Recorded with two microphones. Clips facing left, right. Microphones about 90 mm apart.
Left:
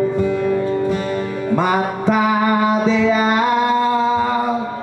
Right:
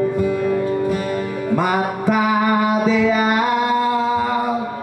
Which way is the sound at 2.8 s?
25° left (ahead or behind).